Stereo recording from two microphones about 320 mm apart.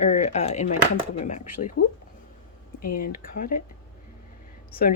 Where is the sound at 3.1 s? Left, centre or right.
Left.